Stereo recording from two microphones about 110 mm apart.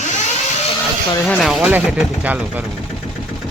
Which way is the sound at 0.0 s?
90° left.